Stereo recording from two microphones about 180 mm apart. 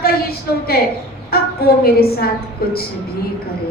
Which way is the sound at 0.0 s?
60° left (ahead or behind).